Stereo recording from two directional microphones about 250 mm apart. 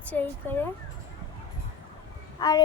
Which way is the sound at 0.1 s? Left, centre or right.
Centre.